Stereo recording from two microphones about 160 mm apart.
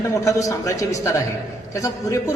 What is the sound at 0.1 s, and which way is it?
A man's voice, 20° left (ahead or behind).